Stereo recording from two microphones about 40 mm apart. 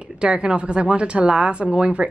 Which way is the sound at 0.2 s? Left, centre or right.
Right.